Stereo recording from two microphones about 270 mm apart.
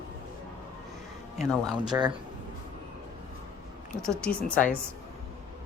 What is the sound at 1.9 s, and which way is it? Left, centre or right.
Speech, centre.